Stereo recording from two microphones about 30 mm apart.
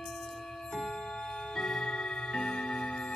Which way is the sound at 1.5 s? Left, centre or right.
Centre.